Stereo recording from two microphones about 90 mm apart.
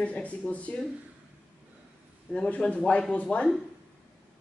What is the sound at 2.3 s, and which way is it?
A woman's voice, 15° left (ahead or behind).